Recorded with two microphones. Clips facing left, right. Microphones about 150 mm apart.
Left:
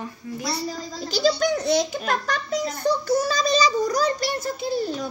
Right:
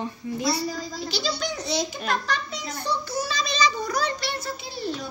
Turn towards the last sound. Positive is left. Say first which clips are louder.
# left 6 dB
turn(degrees=50)  # may be behind; listen again after turning